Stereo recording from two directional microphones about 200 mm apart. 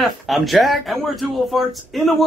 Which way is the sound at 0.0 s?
Centre (ahead or behind).